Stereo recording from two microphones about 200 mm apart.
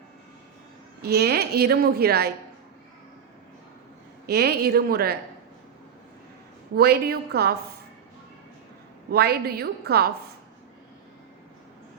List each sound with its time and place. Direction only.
1.0 s a woman's voice: 50° right (ahead or behind)
4.3 s a woman's voice: 55° right (ahead or behind)
6.7 s a woman's voice: 50° right (ahead or behind)
9.0 s a woman's voice: 50° right (ahead or behind)